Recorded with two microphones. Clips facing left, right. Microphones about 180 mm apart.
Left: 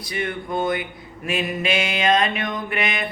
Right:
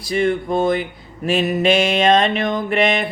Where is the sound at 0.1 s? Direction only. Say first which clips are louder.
Right 8 dB; 30° right (ahead or behind).